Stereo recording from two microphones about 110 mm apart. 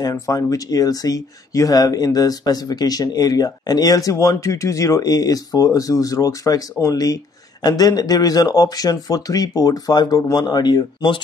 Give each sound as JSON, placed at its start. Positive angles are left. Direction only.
{"t": 0.0, "sound": "speech", "side_deg": 30}